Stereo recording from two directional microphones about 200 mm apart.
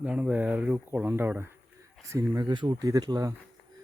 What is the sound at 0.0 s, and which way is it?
Speech, 5° right (ahead or behind).